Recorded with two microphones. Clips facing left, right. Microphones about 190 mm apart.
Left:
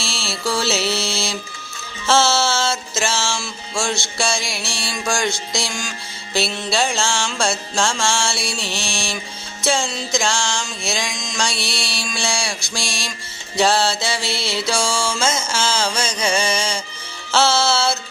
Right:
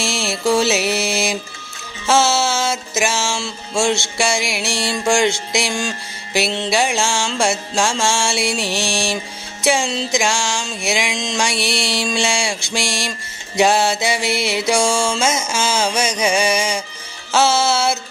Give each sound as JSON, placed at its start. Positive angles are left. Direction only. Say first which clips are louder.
{"t": 0.0, "sound": "music", "louder": "right 6 dB", "side_deg": -20}
{"t": 6.7, "sound": "music", "louder": "right 1 dB", "side_deg": -15}
{"t": 11.1, "sound": "a sound", "louder": "right 7 dB", "side_deg": -30}
{"t": 11.3, "sound": "music", "louder": "right 3 dB", "side_deg": -20}